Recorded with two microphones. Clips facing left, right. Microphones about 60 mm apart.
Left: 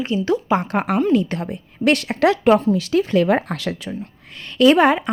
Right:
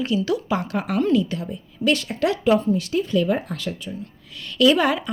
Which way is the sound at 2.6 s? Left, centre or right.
Left.